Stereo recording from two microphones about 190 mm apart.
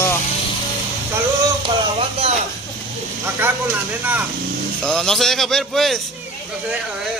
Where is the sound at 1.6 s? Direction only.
30° right (ahead or behind).